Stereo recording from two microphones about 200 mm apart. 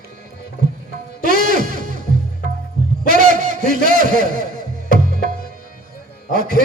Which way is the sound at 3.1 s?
40° right (ahead or behind).